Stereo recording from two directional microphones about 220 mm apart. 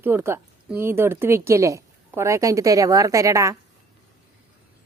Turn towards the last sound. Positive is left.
turn(degrees=-15)  # may be behind; listen again after turning